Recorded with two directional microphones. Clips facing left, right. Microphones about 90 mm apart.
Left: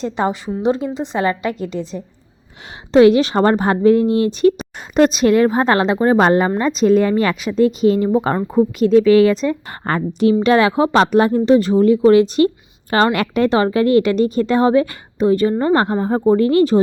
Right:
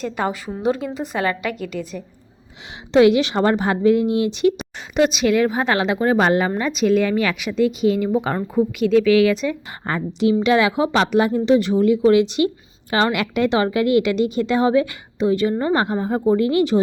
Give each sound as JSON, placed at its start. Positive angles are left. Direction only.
{"t": 0.0, "sound": "a woman's voice", "side_deg": 25}
{"t": 2.9, "sound": "a woman's voice", "side_deg": 35}
{"t": 9.8, "sound": "a woman's voice", "side_deg": 50}